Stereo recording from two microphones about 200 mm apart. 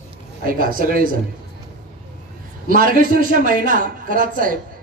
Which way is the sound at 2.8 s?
45° right (ahead or behind).